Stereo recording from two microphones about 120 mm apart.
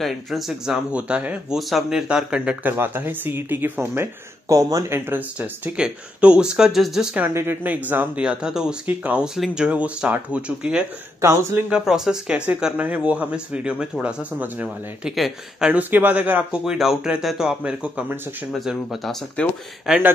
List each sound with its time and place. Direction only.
0.0 s speech: centre (ahead or behind)
1.6 s speech: centre (ahead or behind)
7.2 s speech: 20° right (ahead or behind)
11.1 s speech: 25° right (ahead or behind)
11.7 s speech: 5° right (ahead or behind)
15.1 s speech: centre (ahead or behind)
15.7 s speech: 15° right (ahead or behind)
18.5 s speech: centre (ahead or behind)
19.4 s speech: 10° left (ahead or behind)
19.9 s speech: 5° right (ahead or behind)